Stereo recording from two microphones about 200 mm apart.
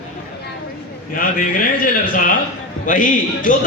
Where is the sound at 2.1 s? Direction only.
45° left (ahead or behind).